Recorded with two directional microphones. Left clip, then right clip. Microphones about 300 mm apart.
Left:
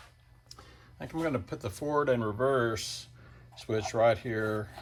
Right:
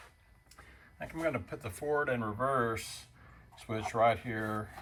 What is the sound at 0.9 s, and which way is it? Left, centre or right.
Speech, centre.